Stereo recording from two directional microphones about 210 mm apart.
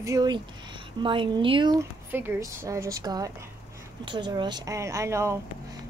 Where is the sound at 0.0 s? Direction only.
15° right (ahead or behind).